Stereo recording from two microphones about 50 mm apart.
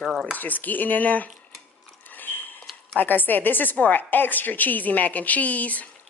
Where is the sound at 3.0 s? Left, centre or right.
Left.